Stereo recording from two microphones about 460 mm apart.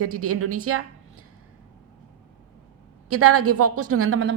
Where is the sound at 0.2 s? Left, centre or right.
Right.